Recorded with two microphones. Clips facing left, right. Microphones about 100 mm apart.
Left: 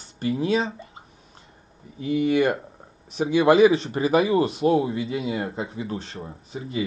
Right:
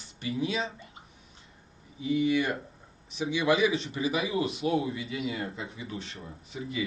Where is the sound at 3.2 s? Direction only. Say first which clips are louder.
Left 9 dB; 45° left (ahead or behind).